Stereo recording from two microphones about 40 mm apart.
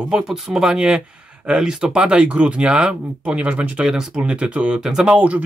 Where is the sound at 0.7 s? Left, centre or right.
Right.